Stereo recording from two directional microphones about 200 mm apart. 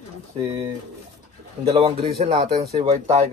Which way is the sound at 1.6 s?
25° right (ahead or behind).